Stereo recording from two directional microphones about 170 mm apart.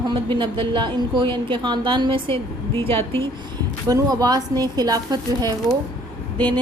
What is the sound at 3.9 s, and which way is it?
Speech, 20° right (ahead or behind).